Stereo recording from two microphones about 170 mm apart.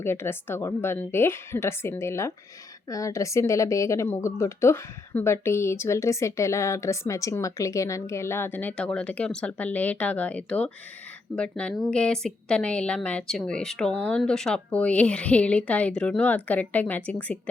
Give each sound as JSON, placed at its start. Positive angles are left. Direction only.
{"t": 0.0, "sound": "a woman's voice", "side_deg": 15}